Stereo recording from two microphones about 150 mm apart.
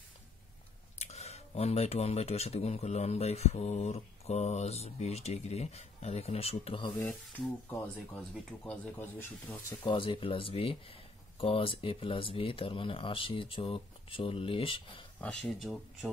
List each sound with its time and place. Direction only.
0.9 s speech: 45° left (ahead or behind)
8.2 s speech: 10° left (ahead or behind)
9.8 s speech: 35° left (ahead or behind)
15.1 s speech: 5° left (ahead or behind)